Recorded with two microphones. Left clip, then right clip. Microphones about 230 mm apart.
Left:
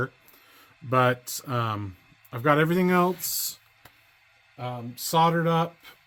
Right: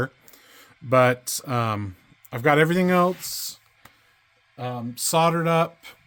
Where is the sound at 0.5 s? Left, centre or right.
Right; by 3.6 s centre.